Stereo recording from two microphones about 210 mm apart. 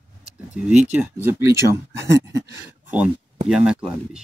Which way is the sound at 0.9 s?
10° right (ahead or behind).